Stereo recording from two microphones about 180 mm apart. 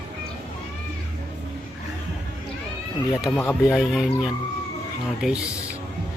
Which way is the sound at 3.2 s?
10° left (ahead or behind).